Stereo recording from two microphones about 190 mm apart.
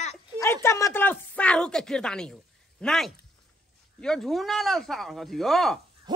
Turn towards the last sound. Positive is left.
turn(degrees=0)  # may be behind; listen again after turning